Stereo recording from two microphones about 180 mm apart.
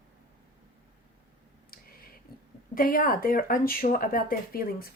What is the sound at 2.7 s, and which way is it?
A woman's voice, 50° left (ahead or behind).